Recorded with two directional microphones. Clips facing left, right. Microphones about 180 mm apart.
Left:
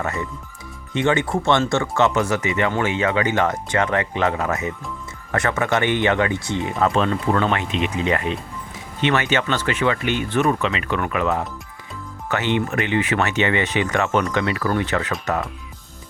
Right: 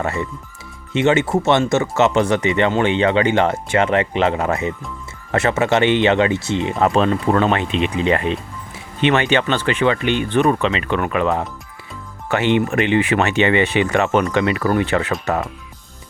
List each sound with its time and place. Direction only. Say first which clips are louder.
0.0 s speech: right 3 dB; 25° right (ahead or behind)
7.3 s speech: right 3 dB; 40° right (ahead or behind)
7.8 s speech: right 3 dB; 25° right (ahead or behind)
12.4 s speech: right 5 dB; 15° right (ahead or behind)